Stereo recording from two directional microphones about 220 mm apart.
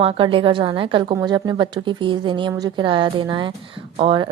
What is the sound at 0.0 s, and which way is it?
A woman's voice, 25° right (ahead or behind).